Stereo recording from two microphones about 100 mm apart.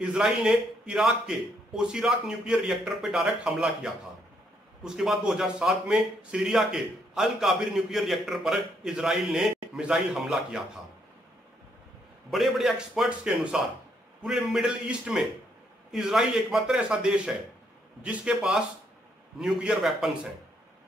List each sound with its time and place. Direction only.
0.0 s a man's voice: 5° right (ahead or behind)
12.3 s a man's voice: centre (ahead or behind)